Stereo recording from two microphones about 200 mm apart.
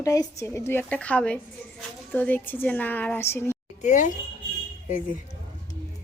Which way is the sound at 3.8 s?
40° left (ahead or behind).